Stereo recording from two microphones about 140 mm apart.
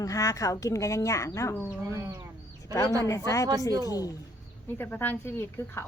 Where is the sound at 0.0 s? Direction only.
25° left (ahead or behind).